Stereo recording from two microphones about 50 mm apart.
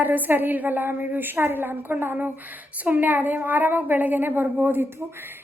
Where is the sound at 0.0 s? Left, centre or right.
Right.